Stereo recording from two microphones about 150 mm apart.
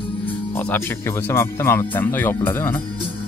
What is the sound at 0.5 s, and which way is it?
Speech, 15° left (ahead or behind).